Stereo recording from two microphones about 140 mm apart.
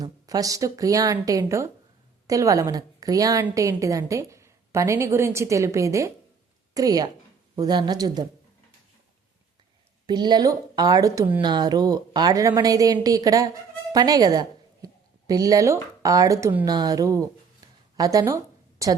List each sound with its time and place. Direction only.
0.0 s a woman's voice: 25° right (ahead or behind)
10.1 s a woman's voice: 30° right (ahead or behind)
16.6 s a woman's voice: 30° right (ahead or behind)